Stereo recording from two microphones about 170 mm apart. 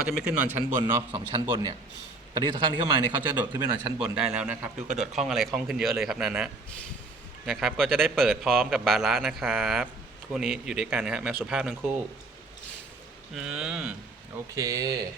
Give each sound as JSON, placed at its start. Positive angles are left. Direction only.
{"t": 0.0, "sound": "a man's voice", "side_deg": -5}
{"t": 1.1, "sound": "a man's voice", "side_deg": -25}
{"t": 3.9, "sound": "a man's voice", "side_deg": -5}
{"t": 13.3, "sound": "a man's voice", "side_deg": -5}
{"t": 14.5, "sound": "a man's voice", "side_deg": -20}